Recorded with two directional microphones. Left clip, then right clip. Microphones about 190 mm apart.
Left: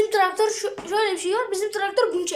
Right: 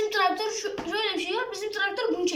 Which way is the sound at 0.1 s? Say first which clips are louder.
Left 5 dB; 45° left (ahead or behind).